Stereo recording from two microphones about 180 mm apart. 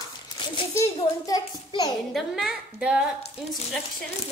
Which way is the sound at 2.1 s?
Centre (ahead or behind).